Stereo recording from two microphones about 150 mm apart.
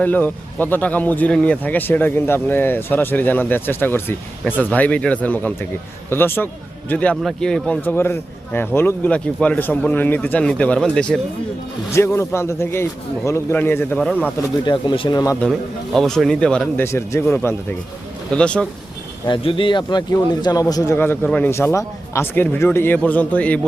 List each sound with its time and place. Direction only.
0.0 s a man's voice: 10° left (ahead or behind)
11.9 s speech: 15° left (ahead or behind)
14.6 s a man's voice: 30° left (ahead or behind)
15.4 s speech: 5° left (ahead or behind)
16.8 s speech: 20° left (ahead or behind)
19.3 s a man's voice: 35° left (ahead or behind); by 21.2 s 15° left (ahead or behind)
21.2 s speech: 5° left (ahead or behind)
21.5 s speech: 20° left (ahead or behind)